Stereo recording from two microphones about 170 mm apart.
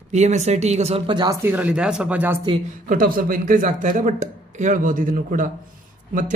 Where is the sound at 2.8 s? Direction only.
55° right (ahead or behind).